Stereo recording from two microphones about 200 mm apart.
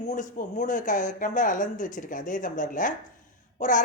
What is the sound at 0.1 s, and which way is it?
A woman's voice, 40° left (ahead or behind).